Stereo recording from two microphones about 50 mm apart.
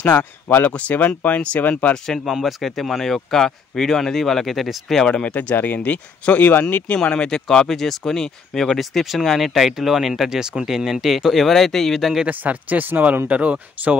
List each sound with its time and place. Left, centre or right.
0.0 s speech: left
0.7 s speech: left
2.1 s speech: centre
5.0 s speech: left
7.1 s speech: centre
8.7 s speech: centre
12.3 s speech: right
13.3 s speech: right